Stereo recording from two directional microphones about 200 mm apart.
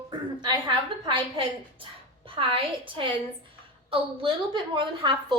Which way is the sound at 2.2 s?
25° right (ahead or behind).